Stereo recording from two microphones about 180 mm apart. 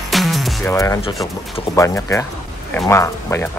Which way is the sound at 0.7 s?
15° left (ahead or behind).